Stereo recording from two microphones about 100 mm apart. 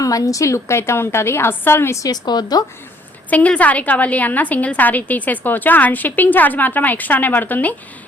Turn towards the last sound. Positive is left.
turn(degrees=15)  # may be behind; listen again after turning